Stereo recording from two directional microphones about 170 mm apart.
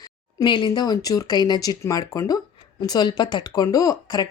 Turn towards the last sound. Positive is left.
turn(degrees=20)  # may be behind; listen again after turning